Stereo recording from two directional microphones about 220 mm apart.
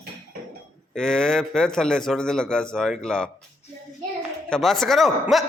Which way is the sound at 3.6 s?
30° left (ahead or behind).